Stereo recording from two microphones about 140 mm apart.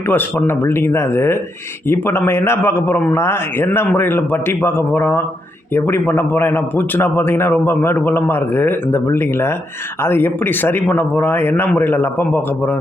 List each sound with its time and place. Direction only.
0.1 s a man's voice: 15° left (ahead or behind)